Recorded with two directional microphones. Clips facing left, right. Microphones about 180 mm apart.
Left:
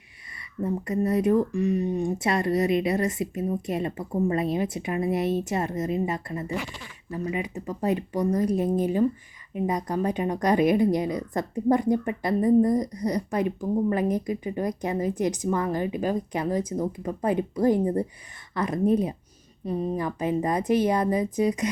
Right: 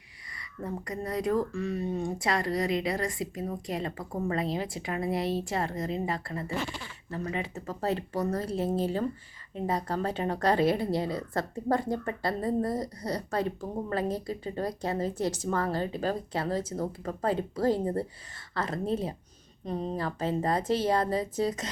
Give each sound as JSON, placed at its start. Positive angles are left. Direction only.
{"t": 0.6, "sound": "speech", "side_deg": 25}